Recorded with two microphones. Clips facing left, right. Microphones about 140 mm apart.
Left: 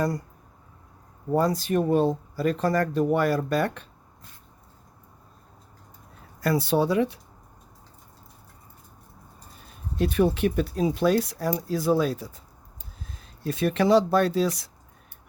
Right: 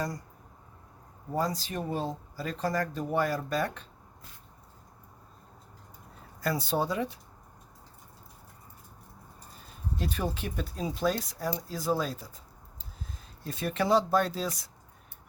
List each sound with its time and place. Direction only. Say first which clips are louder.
1.3 s speech: left 8 dB; 60° left (ahead or behind)
6.4 s speech: left 7 dB; 70° left (ahead or behind)
10.0 s speech: left 12 dB; 65° left (ahead or behind)